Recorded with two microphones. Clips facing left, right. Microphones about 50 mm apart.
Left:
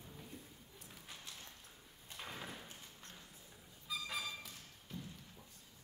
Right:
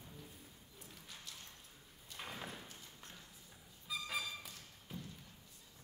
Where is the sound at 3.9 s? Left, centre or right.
Centre.